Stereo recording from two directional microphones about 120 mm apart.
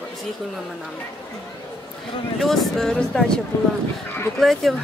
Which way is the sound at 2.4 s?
Centre (ahead or behind).